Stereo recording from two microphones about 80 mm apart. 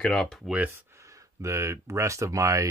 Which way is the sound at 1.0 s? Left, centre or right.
Right.